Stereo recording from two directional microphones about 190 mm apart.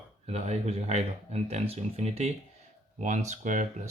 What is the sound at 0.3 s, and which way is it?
Speech, 35° right (ahead or behind).